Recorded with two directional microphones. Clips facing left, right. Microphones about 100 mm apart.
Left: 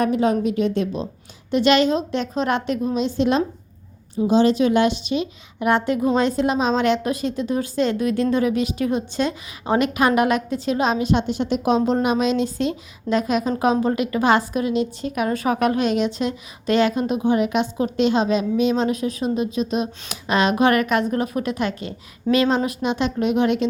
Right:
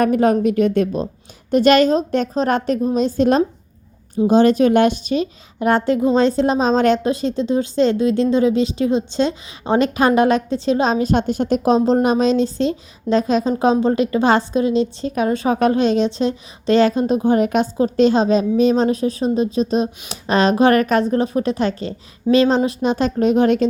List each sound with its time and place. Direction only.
0.0 s a woman's voice: 50° right (ahead or behind); by 17.2 s 35° right (ahead or behind)
17.2 s a woman's voice: 45° right (ahead or behind)